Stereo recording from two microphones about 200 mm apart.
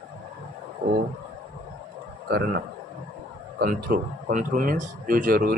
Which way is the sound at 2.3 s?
50° right (ahead or behind).